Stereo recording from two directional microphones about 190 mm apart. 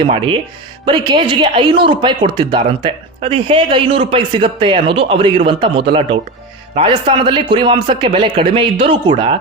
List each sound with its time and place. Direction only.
0.0 s speech: 25° right (ahead or behind)